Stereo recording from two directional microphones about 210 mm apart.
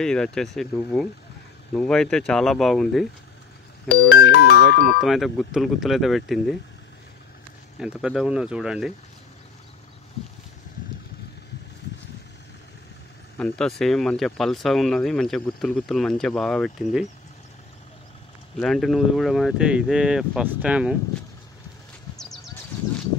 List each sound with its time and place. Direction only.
0.0 s speech: 5° left (ahead or behind)
3.9 s music: 50° left (ahead or behind)
4.8 s speech: centre (ahead or behind)
7.7 s speech: 5° right (ahead or behind)
13.4 s speech: 5° left (ahead or behind)
18.6 s speech: centre (ahead or behind)
22.1 s horse: centre (ahead or behind)